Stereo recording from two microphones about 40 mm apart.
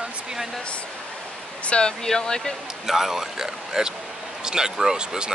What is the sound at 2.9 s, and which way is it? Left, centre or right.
Speech, centre.